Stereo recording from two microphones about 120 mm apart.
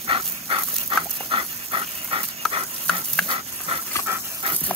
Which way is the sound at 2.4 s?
5° left (ahead or behind).